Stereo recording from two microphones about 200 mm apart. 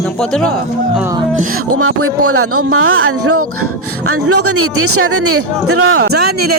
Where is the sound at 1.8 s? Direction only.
90° right.